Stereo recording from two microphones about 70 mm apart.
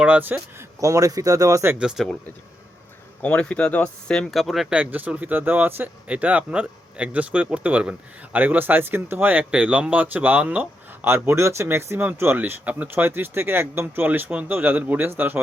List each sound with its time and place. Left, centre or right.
0.0 s speech: right
0.8 s speech: right
1.8 s speech: centre
3.2 s speech: centre
4.3 s speech: centre
4.7 s speech: right
9.4 s speech: centre
11.0 s speech: right
12.4 s speech: right